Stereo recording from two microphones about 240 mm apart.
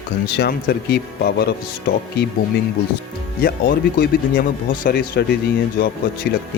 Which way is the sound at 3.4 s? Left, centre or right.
Left.